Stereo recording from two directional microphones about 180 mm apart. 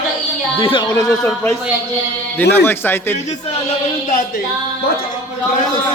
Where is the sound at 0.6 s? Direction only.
25° left (ahead or behind).